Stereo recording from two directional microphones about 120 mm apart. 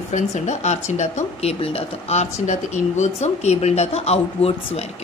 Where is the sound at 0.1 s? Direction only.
70° left (ahead or behind).